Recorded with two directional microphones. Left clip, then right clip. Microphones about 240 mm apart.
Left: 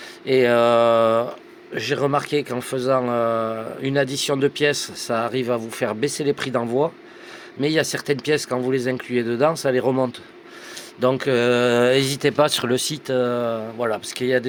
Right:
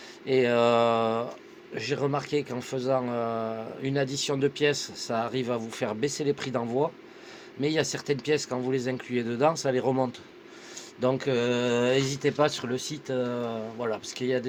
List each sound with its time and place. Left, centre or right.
0.3 s speech: left